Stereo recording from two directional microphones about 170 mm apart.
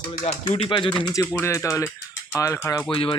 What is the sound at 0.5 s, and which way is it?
Speech, 30° left (ahead or behind).